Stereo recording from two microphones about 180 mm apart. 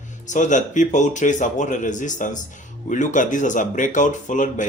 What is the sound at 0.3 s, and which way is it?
Speech, 45° left (ahead or behind).